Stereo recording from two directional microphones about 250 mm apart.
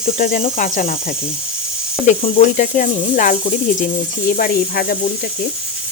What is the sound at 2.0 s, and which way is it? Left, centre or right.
Speech, left.